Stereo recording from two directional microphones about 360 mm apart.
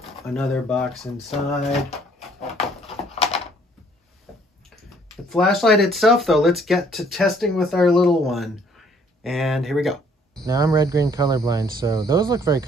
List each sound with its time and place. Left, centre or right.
0.2 s speech: centre
1.6 s speech: centre
4.3 s a sound: centre
4.6 s speech: centre